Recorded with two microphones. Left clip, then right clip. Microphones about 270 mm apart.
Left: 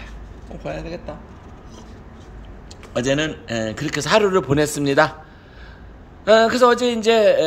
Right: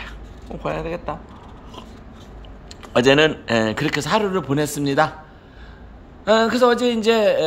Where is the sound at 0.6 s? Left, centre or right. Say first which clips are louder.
Right 4 dB; centre.